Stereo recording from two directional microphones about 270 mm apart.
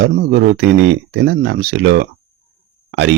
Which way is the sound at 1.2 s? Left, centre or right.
Right.